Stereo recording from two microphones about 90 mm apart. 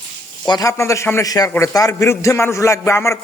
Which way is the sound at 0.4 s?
50° left (ahead or behind).